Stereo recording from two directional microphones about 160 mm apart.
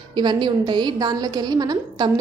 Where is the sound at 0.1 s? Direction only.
30° right (ahead or behind).